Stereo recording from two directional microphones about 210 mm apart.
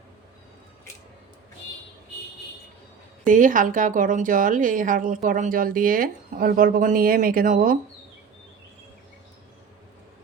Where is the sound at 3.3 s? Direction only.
40° right (ahead or behind).